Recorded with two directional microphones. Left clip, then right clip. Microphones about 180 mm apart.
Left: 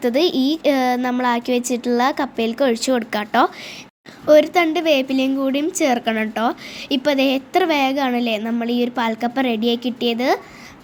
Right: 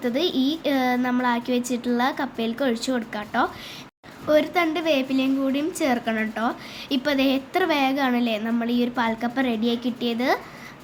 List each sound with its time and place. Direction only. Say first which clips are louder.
0.0 s a woman's voice: left 6 dB; 35° left (ahead or behind)
4.3 s a woman's voice: left 7 dB; 30° left (ahead or behind)